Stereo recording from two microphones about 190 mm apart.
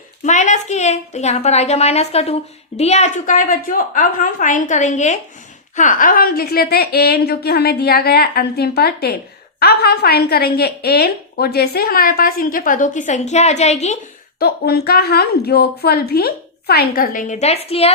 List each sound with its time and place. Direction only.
0.3 s a woman's voice: 40° left (ahead or behind)
14.3 s a woman's voice: 55° left (ahead or behind); by 17.9 s 30° left (ahead or behind)